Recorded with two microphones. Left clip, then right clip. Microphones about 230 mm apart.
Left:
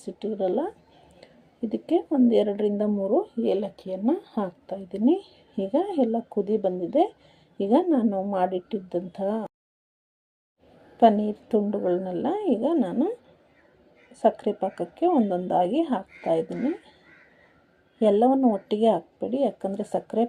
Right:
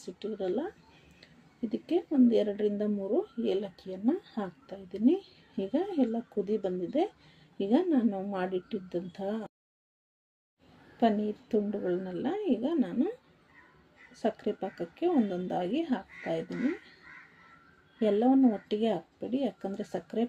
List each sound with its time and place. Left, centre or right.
0.0 s a woman's voice: centre
11.0 s a woman's voice: centre
14.1 s a woman's voice: centre
18.0 s a woman's voice: centre